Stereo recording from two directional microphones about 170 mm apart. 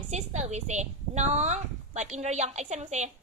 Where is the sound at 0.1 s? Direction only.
40° right (ahead or behind).